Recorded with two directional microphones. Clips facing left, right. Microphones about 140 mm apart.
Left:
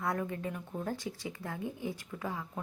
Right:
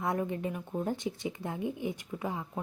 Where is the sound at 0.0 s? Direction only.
20° right (ahead or behind).